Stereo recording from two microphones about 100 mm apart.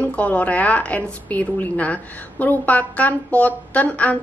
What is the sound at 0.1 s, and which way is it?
A woman's voice, 15° left (ahead or behind).